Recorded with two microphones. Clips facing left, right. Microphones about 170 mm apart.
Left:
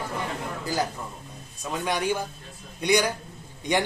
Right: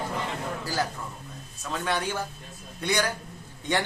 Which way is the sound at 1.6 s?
15° left (ahead or behind).